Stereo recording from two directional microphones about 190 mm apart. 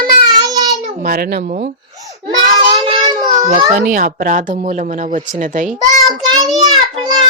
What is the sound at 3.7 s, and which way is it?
Speech, 45° right (ahead or behind).